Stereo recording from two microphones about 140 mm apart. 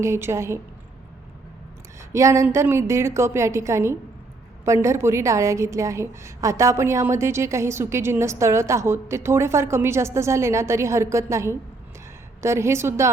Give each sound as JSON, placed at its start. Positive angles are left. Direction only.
{"t": 0.0, "sound": "a woman's voice", "side_deg": -20}
{"t": 2.1, "sound": "a woman's voice", "side_deg": -20}